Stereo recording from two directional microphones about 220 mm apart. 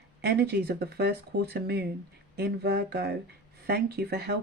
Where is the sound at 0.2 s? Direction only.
45° right (ahead or behind).